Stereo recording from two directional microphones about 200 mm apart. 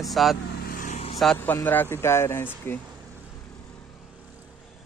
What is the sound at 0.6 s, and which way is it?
Vehicle, 45° left (ahead or behind).